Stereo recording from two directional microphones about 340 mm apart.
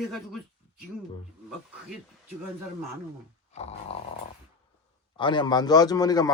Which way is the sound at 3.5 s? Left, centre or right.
Centre.